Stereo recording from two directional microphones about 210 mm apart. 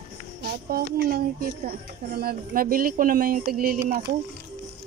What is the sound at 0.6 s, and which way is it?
Speech, 45° right (ahead or behind).